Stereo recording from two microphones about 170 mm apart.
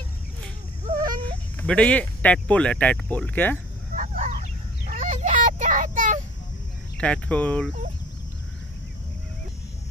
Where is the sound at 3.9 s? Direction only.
45° right (ahead or behind).